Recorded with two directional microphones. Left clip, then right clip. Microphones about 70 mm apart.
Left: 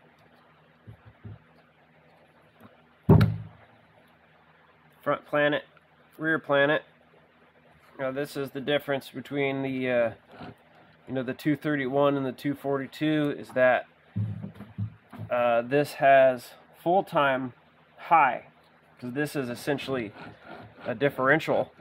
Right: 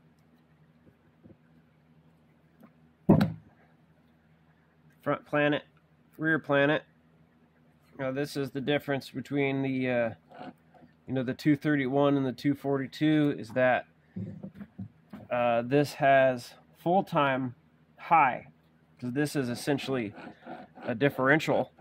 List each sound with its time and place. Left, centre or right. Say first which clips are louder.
5.0 s speech: left 3 dB; right
8.0 s speech: left 2 dB; right
15.2 s speech: left 3 dB; right